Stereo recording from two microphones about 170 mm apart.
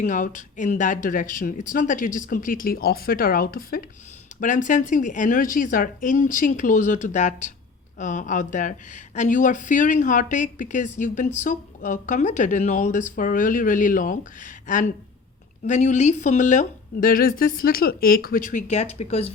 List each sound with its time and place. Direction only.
0.0 s a woman's voice: 50° left (ahead or behind)